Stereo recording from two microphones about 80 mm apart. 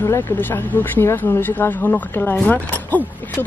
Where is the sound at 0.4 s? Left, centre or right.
Left.